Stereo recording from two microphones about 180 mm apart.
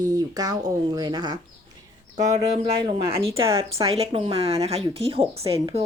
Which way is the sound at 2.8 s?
30° right (ahead or behind).